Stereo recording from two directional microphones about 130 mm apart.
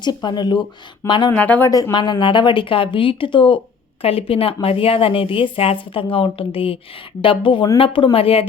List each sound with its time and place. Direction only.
0.0 s speech: 35° left (ahead or behind)
1.3 s speech: 10° left (ahead or behind)
1.7 s speech: 30° left (ahead or behind)